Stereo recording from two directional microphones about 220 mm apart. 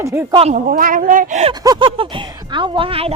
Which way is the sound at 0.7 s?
40° right (ahead or behind).